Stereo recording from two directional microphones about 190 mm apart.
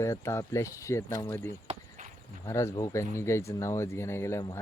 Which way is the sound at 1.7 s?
40° right (ahead or behind).